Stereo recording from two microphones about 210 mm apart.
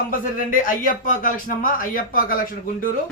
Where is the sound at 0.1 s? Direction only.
40° left (ahead or behind).